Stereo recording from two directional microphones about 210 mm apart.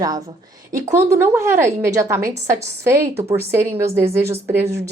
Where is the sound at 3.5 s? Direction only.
15° right (ahead or behind).